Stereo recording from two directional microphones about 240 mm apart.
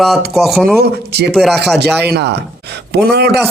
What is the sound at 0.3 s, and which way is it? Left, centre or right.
Speech, centre.